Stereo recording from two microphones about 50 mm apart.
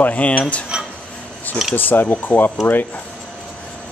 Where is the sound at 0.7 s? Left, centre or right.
Centre.